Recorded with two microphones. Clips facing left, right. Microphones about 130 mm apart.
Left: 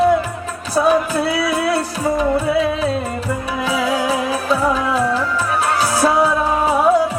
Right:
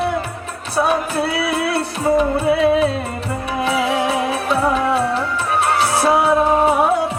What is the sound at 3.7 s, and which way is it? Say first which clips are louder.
Music: even; 25° right (ahead or behind).